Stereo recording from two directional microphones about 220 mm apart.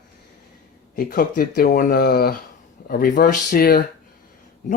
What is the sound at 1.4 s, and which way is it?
A man's voice, 40° left (ahead or behind).